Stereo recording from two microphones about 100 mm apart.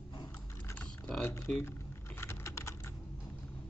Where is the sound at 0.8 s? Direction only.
10° left (ahead or behind).